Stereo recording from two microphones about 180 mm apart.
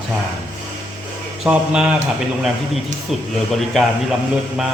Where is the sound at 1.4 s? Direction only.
5° right (ahead or behind).